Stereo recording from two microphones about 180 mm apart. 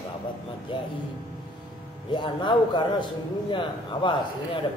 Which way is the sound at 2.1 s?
25° left (ahead or behind).